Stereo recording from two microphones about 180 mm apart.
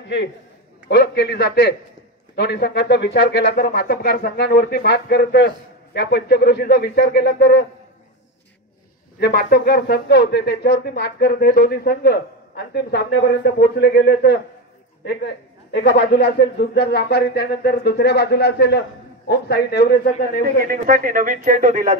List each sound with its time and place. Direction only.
0.0 s a man's voice: 70° left (ahead or behind)
9.2 s speech: 60° left (ahead or behind)
15.7 s speech: 75° left (ahead or behind)
20.1 s speech: 50° left (ahead or behind)
20.6 s speech: 50° right (ahead or behind)